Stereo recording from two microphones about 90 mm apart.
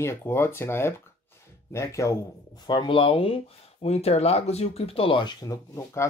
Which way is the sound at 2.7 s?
65° left (ahead or behind).